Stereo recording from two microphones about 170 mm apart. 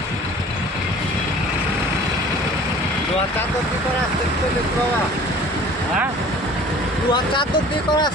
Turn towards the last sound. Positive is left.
turn(degrees=30)  # may be behind; listen again after turning